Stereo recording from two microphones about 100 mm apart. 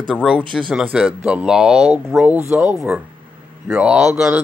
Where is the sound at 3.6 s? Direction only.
5° right (ahead or behind).